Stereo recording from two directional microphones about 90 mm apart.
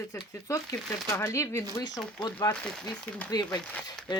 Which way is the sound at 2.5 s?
45° left (ahead or behind).